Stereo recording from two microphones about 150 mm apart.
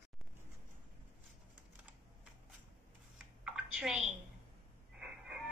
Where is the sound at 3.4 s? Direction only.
5° right (ahead or behind).